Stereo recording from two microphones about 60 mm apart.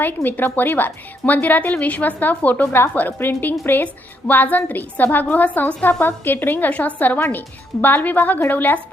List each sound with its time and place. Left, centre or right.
0.0 s a woman's voice: left
2.6 s a woman's voice: left